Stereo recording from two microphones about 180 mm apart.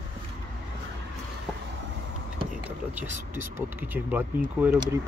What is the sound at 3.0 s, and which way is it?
Speech, 10° right (ahead or behind).